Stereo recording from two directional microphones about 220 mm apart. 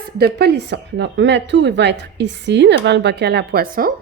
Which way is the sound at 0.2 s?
45° right (ahead or behind).